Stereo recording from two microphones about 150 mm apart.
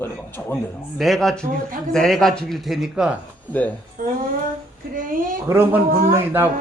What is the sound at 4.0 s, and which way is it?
A woman's voice, 70° right (ahead or behind).